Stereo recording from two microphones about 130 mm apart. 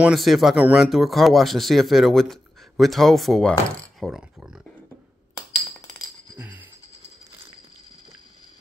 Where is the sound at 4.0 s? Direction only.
5° right (ahead or behind).